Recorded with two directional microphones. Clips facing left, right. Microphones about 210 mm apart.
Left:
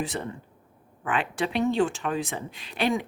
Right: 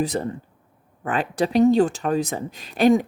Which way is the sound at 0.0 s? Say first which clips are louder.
Right 7 dB; 40° right (ahead or behind).